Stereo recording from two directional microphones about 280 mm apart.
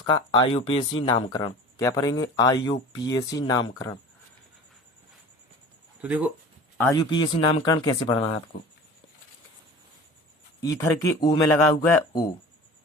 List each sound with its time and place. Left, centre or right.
0.0 s speech: centre
6.0 s speech: centre
6.7 s speech: centre
10.6 s speech: centre